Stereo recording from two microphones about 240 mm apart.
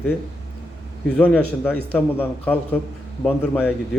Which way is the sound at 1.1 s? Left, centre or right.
Centre.